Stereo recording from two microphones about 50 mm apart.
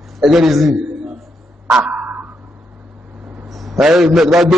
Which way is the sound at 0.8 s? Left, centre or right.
Centre.